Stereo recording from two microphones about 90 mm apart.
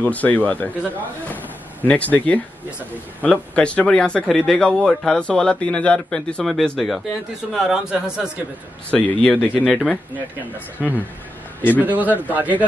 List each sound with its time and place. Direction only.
0.0 s speech: 15° left (ahead or behind)
1.3 s door: 15° left (ahead or behind)
3.2 s speech: 15° left (ahead or behind); by 8.3 s 10° right (ahead or behind)
8.9 s speech: 15° left (ahead or behind)
9.7 s speech: centre (ahead or behind)
11.7 s speech: 20° right (ahead or behind)